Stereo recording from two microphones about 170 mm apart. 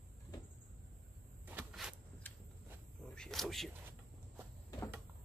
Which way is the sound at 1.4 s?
10° right (ahead or behind).